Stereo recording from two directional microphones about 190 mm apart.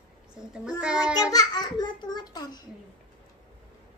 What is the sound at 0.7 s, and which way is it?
Child singing, 5° right (ahead or behind).